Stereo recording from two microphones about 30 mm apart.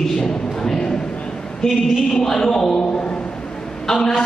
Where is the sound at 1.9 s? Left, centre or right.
Centre.